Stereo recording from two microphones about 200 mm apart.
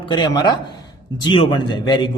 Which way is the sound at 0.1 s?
20° left (ahead or behind).